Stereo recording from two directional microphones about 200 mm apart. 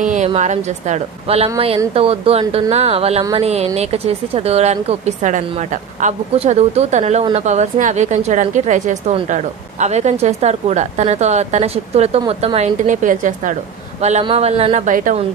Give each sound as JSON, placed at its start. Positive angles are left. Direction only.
{"t": 0.0, "sound": "a woman's voice", "side_deg": -35}